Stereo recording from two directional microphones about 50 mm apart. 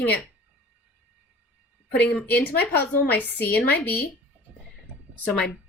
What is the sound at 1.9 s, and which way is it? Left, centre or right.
Speech, left.